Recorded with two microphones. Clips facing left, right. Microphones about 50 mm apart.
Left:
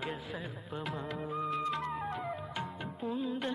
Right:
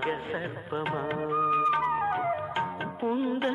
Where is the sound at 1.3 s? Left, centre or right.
Right.